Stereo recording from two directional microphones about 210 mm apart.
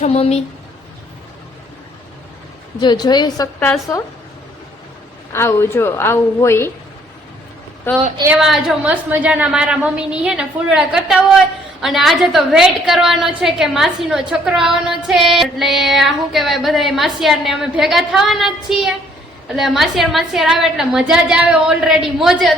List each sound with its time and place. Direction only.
0.0 s a woman's voice: 30° left (ahead or behind)
2.8 s a woman's voice: 20° left (ahead or behind)
5.3 s a woman's voice: 10° left (ahead or behind)
7.9 s a woman's voice: 10° left (ahead or behind)
8.2 s a woman's voice: 5° right (ahead or behind)